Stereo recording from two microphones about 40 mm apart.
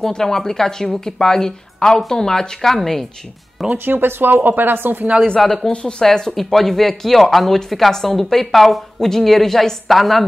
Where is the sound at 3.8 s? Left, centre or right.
Right.